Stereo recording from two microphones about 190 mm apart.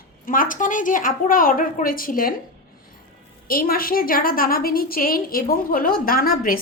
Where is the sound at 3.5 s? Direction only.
50° left (ahead or behind).